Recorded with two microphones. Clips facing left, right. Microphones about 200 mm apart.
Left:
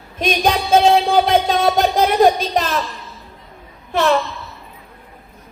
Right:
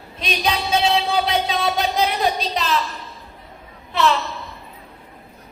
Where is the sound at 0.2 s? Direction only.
50° left (ahead or behind).